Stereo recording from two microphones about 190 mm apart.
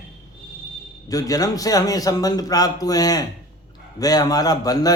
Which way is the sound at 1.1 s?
20° left (ahead or behind).